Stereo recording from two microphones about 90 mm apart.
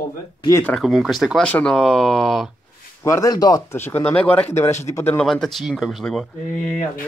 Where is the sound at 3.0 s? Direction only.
30° left (ahead or behind).